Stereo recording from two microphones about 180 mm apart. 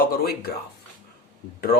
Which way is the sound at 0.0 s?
55° left (ahead or behind).